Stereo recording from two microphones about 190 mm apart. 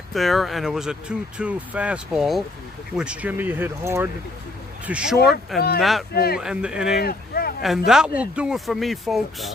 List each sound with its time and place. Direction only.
0.1 s speech: centre (ahead or behind)
5.5 s speech: 55° left (ahead or behind)
5.8 s speech: centre (ahead or behind)
6.1 s speech: 55° left (ahead or behind)
6.4 s speech: 5° right (ahead or behind)
7.0 s a sound: 50° left (ahead or behind)
7.9 s speech: 5° right (ahead or behind)